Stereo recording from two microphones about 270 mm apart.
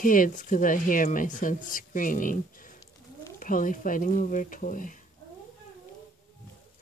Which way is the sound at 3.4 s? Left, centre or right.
Left.